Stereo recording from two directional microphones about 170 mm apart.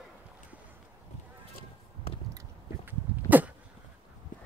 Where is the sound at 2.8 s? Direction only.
10° right (ahead or behind).